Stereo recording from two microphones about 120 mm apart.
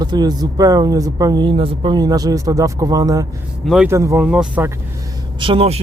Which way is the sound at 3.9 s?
25° right (ahead or behind).